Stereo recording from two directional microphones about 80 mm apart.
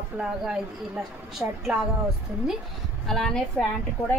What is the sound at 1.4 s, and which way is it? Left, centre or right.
Speech, centre.